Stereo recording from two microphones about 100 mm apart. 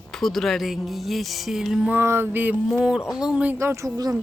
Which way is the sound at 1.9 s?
25° right (ahead or behind).